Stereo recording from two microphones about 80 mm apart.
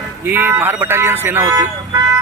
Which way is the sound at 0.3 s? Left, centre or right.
Right.